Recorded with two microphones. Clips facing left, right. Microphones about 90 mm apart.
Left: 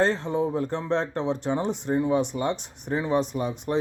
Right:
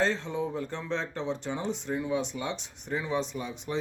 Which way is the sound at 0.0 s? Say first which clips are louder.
Left 5 dB; 55° left (ahead or behind).